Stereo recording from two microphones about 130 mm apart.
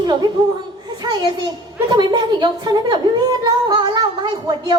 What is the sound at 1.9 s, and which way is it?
Speech, 35° right (ahead or behind).